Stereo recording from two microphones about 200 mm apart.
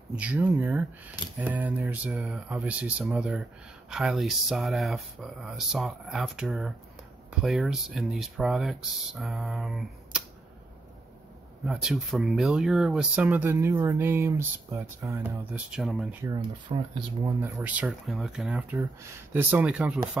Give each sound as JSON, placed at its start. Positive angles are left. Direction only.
{"t": 0.1, "sound": "speech", "side_deg": -5}
{"t": 11.6, "sound": "speech", "side_deg": 0}
{"t": 16.2, "sound": "speech", "side_deg": -20}
{"t": 17.6, "sound": "speech", "side_deg": -5}